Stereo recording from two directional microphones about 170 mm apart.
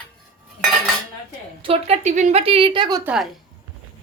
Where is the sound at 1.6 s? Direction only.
35° right (ahead or behind).